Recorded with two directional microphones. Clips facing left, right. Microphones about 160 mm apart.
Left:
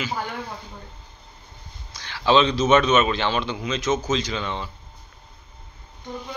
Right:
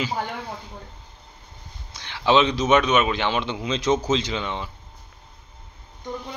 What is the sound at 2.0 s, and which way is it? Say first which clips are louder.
A man's voice: even; 20° right (ahead or behind).